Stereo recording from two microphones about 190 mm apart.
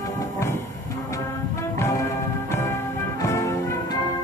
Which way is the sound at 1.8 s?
15° left (ahead or behind).